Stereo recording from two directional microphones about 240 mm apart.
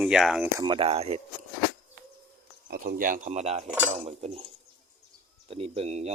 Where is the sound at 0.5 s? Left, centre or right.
Centre.